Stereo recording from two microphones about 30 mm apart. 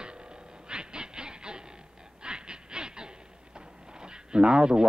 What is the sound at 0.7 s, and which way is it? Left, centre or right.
Train, right.